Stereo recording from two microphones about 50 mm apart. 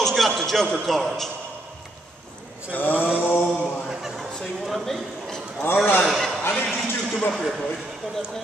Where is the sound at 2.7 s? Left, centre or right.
Left.